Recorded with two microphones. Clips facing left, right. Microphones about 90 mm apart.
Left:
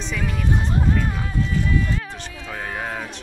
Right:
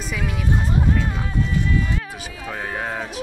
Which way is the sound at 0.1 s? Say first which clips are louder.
Even; centre (ahead or behind).